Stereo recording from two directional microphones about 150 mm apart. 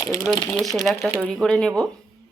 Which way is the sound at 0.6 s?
Centre (ahead or behind).